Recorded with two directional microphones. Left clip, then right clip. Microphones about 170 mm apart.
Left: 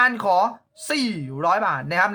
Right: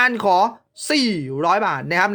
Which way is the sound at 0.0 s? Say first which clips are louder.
Right 2 dB; 30° right (ahead or behind).